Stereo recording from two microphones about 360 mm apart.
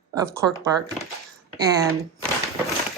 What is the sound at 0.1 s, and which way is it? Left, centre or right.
Speech, centre.